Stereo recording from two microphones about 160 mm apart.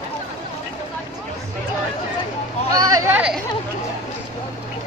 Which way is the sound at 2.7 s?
20° right (ahead or behind).